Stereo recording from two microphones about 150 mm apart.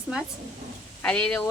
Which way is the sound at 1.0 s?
5° left (ahead or behind).